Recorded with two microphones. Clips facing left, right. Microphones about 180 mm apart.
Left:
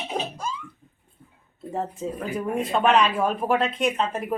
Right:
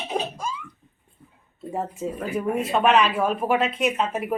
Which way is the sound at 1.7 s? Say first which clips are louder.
Even; 10° right (ahead or behind).